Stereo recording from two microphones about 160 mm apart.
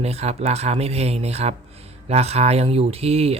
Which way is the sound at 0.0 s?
40° right (ahead or behind).